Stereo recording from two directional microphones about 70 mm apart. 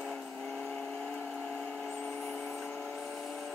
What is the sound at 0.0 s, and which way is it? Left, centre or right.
Vehicle, centre.